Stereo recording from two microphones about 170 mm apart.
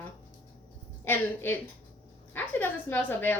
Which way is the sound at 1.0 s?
10° left (ahead or behind).